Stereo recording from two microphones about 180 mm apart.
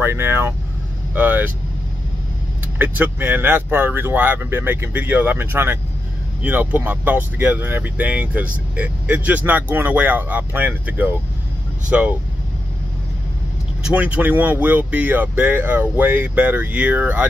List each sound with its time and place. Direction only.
0.0 s speech: 15° right (ahead or behind)
2.8 s speech: 10° right (ahead or behind)
13.8 s speech: 5° right (ahead or behind)